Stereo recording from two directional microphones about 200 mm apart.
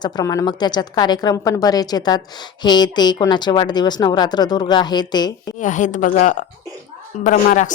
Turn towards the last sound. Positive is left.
turn(degrees=40)  # may be behind; listen again after turning